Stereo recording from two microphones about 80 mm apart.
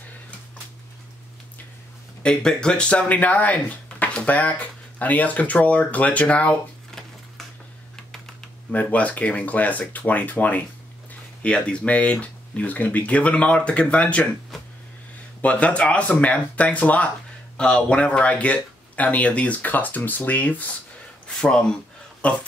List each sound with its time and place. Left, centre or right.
2.2 s speech: centre
8.7 s speech: centre
14.5 s a sound: centre
15.4 s speech: centre
21.4 s speech: centre